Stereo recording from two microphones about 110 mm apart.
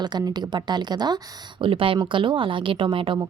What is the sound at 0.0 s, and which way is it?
Speech, 40° right (ahead or behind).